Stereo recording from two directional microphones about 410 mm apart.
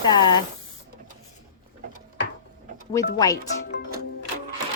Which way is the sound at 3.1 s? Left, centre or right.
Centre.